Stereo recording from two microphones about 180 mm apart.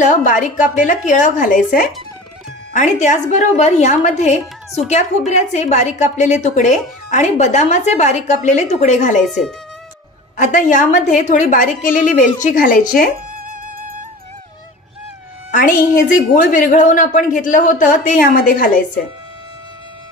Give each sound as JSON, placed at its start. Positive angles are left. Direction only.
{"t": 0.0, "sound": "a woman's voice", "side_deg": 45}
{"t": 10.3, "sound": "a woman's voice", "side_deg": 45}
{"t": 15.5, "sound": "a woman's voice", "side_deg": 45}